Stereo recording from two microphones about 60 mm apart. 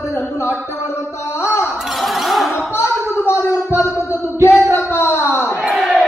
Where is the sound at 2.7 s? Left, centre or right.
Left.